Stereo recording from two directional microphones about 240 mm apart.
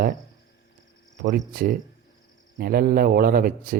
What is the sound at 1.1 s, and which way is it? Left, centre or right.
Speech, right.